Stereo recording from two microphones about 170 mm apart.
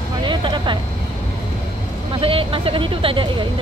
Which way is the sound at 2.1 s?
30° right (ahead or behind).